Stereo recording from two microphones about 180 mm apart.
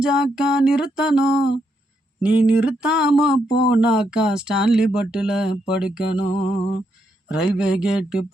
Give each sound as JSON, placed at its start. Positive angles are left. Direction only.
{"t": 0.0, "sound": "speech", "side_deg": -5}
{"t": 6.3, "sound": "a sound", "side_deg": 30}
{"t": 7.3, "sound": "speech", "side_deg": -5}